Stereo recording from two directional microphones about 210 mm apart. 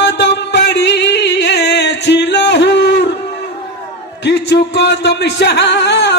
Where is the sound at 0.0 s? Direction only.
55° left (ahead or behind).